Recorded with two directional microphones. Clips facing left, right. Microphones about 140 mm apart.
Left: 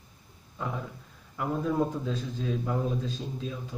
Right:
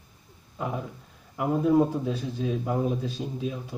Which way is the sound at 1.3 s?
15° right (ahead or behind).